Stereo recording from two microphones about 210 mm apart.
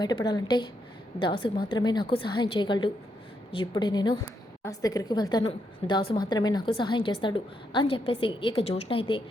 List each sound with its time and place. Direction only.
0.0 s a woman's voice: 20° left (ahead or behind)